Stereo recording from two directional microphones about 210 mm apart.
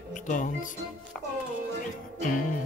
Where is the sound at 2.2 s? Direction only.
40° left (ahead or behind).